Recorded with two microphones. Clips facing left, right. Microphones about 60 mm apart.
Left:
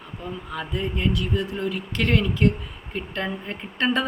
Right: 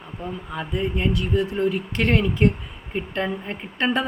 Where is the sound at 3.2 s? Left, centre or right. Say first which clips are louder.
Right 2 dB; centre.